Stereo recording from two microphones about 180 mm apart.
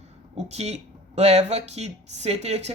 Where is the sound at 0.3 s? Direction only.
40° right (ahead or behind).